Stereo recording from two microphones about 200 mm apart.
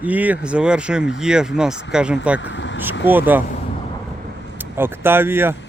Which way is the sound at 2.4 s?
65° left (ahead or behind).